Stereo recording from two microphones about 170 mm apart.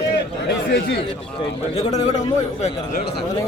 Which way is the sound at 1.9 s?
40° left (ahead or behind).